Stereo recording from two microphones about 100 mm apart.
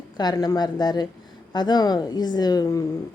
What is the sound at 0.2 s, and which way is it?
A woman's voice, 40° left (ahead or behind).